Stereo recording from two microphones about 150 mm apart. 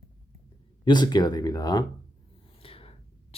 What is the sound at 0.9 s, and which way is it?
Speech, 30° left (ahead or behind).